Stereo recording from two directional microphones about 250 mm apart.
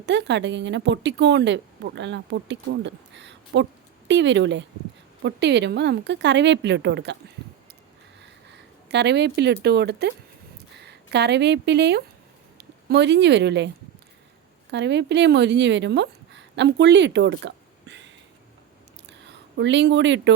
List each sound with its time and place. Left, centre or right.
0.0 s speech: right
8.9 s a woman's voice: right
14.7 s speech: right
19.5 s speech: right